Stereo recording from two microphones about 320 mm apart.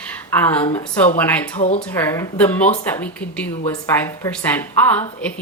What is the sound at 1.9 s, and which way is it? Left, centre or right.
Speech, centre.